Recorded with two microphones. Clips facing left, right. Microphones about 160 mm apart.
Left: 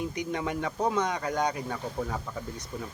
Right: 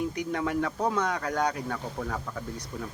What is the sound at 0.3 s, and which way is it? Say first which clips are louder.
Speech: right 2 dB; 15° left (ahead or behind).